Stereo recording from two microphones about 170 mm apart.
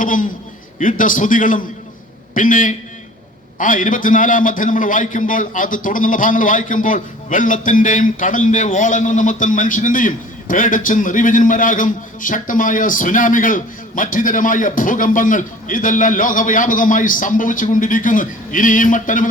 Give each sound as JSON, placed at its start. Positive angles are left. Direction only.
{"t": 0.0, "sound": "a man's voice", "side_deg": 50}